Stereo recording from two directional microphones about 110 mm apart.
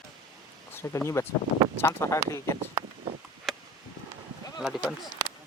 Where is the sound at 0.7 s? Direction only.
25° left (ahead or behind).